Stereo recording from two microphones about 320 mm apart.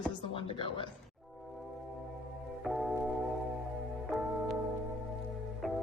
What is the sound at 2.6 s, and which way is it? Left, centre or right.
Music, centre.